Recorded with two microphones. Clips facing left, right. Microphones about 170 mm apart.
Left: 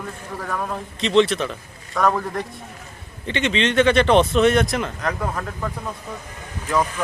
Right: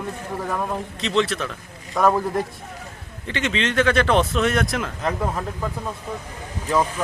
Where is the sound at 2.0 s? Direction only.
20° right (ahead or behind).